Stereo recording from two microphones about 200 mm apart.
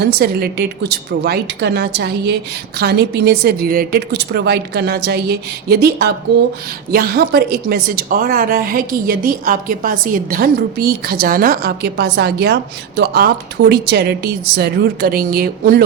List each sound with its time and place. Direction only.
0.0 s a woman's voice: 50° right (ahead or behind)